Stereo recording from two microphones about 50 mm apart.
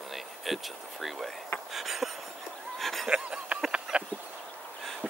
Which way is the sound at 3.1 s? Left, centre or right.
Right.